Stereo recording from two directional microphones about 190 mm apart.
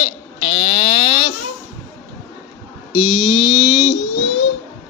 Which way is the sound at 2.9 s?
25° left (ahead or behind).